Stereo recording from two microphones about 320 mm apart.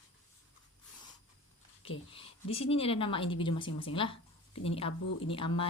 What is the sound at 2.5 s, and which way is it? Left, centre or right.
A woman's voice, centre.